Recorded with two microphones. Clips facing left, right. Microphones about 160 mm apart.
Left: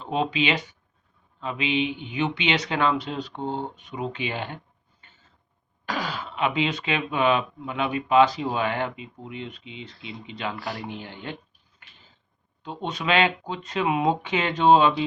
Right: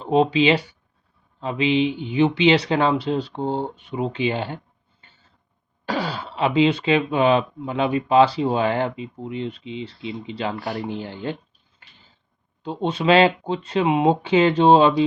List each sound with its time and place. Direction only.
0.0 s speech: 30° right (ahead or behind)
11.8 s mechanisms: 30° right (ahead or behind)
12.6 s speech: 30° right (ahead or behind)